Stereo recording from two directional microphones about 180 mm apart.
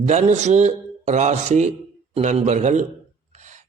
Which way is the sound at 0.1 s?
40° right (ahead or behind).